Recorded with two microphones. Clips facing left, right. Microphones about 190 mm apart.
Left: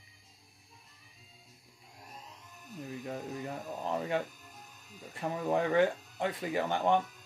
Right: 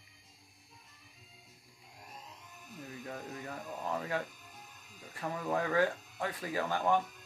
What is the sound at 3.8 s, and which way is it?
Speech, 25° left (ahead or behind).